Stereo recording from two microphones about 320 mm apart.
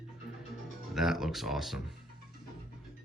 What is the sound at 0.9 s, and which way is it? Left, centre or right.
Speech, centre.